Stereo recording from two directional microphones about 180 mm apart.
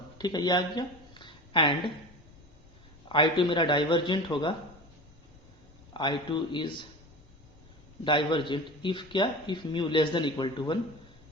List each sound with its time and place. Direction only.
0.2 s speech: 20° left (ahead or behind)
3.1 s a man's voice: 25° left (ahead or behind)
5.9 s a man's voice: 25° left (ahead or behind)
8.0 s a man's voice: 25° left (ahead or behind)